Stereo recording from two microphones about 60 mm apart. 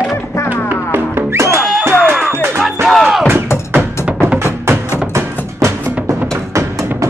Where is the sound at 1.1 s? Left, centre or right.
Right.